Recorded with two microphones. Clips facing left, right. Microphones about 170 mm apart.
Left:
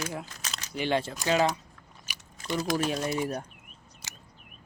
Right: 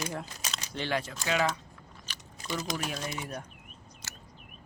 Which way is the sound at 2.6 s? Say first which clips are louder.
Left 9 dB; 30° left (ahead or behind).